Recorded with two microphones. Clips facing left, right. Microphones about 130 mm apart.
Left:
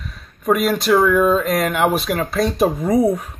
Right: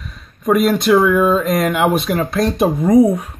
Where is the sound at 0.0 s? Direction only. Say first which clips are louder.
Right 2 dB; centre (ahead or behind).